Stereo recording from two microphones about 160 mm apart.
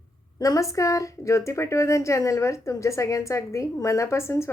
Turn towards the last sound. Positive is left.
turn(degrees=15)  # may be behind; listen again after turning